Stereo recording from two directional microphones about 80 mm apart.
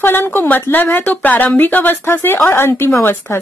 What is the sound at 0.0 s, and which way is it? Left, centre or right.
Speech, left.